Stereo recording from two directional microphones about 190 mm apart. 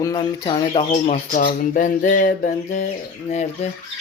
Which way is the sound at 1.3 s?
45° left (ahead or behind).